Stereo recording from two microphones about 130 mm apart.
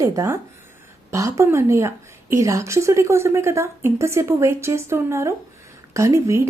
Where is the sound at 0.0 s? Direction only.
25° right (ahead or behind).